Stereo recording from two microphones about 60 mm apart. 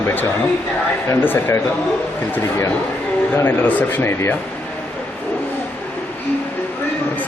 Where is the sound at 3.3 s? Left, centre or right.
Left.